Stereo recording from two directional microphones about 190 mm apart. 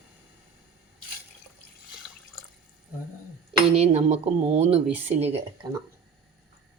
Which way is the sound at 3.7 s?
35° right (ahead or behind).